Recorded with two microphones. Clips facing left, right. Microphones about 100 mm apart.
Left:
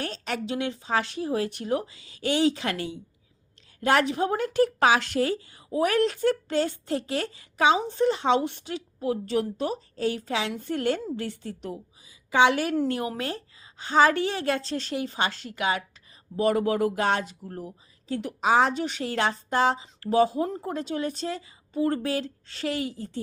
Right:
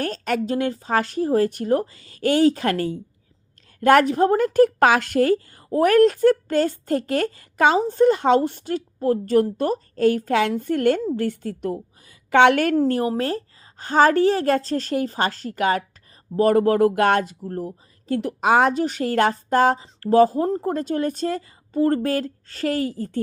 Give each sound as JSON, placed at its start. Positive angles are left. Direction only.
{"t": 0.0, "sound": "a woman's voice", "side_deg": -45}
{"t": 12.7, "sound": "a woman's voice", "side_deg": -40}